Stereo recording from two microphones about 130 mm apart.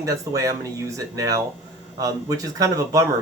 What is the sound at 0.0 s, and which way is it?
Speech, 25° right (ahead or behind).